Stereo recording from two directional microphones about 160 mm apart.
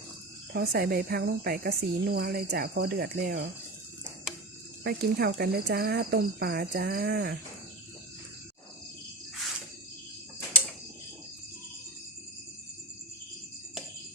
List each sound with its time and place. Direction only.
0.5 s speech: 75° right (ahead or behind)
4.8 s speech: 80° right